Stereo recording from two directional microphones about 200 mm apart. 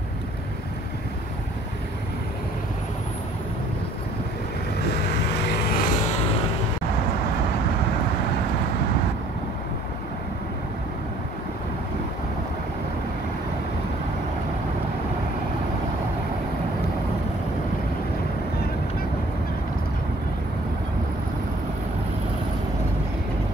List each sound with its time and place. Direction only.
5.3 s vehicle: 40° left (ahead or behind)